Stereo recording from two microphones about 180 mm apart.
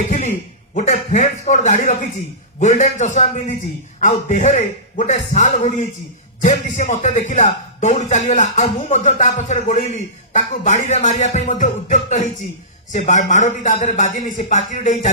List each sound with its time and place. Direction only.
0.7 s speech: 40° left (ahead or behind)